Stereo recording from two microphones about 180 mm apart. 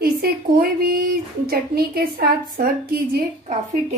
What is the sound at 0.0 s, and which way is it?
Speech, 55° right (ahead or behind).